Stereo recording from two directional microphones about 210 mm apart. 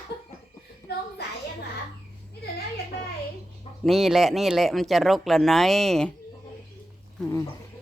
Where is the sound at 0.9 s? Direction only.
50° left (ahead or behind).